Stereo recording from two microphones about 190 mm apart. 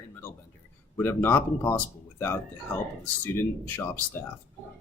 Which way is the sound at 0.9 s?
10° left (ahead or behind).